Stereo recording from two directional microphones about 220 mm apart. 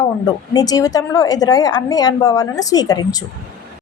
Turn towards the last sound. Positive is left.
turn(degrees=15)  # may be behind; listen again after turning